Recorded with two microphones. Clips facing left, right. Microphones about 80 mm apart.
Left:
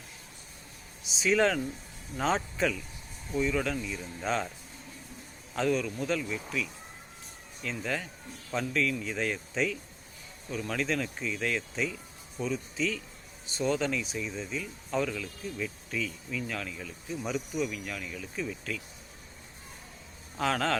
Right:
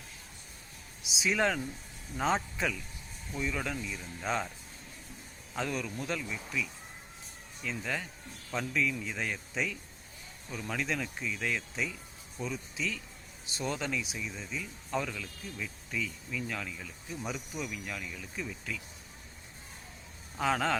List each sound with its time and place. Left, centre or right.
1.1 s speech: centre
5.5 s speech: centre
20.3 s a man's voice: centre